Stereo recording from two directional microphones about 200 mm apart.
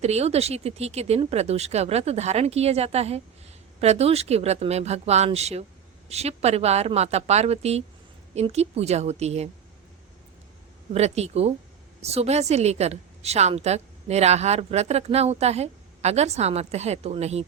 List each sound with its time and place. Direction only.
0.0 s a woman's voice: 30° right (ahead or behind)
10.9 s a woman's voice: 35° right (ahead or behind)